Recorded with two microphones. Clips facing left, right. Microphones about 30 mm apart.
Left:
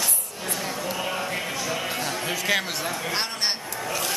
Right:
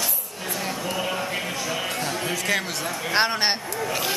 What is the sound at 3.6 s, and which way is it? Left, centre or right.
Speech, centre.